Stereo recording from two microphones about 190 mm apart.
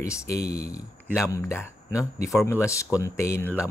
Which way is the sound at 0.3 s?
55° left (ahead or behind).